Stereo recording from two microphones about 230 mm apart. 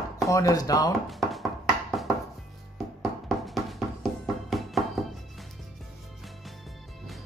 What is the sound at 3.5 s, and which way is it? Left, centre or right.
Music, centre.